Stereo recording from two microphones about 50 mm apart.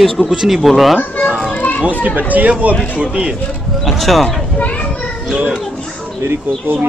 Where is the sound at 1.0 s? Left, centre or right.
Left.